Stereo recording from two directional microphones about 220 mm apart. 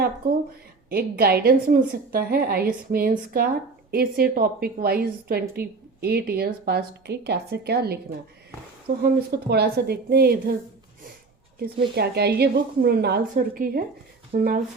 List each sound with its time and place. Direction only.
0.9 s a woman's voice: 45° right (ahead or behind)
11.8 s a woman's voice: 45° right (ahead or behind)